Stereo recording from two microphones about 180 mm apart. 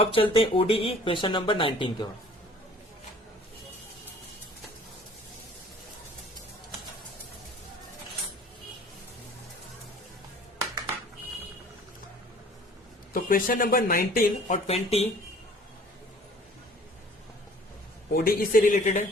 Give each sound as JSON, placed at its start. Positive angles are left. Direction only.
{"t": 0.0, "sound": "speech", "side_deg": 30}
{"t": 13.1, "sound": "speech", "side_deg": 50}
{"t": 18.1, "sound": "speech", "side_deg": 55}